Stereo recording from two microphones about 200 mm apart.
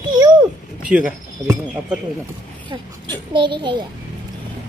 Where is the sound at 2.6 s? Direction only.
20° right (ahead or behind).